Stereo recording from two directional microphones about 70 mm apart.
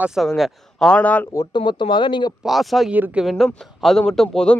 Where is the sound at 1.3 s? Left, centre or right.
Left.